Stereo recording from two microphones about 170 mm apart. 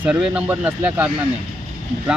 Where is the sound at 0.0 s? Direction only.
10° right (ahead or behind).